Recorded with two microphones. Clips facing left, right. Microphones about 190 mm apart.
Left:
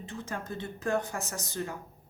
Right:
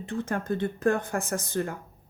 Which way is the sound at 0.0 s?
55° right (ahead or behind).